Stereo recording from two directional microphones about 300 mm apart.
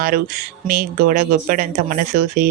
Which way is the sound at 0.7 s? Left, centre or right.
Right.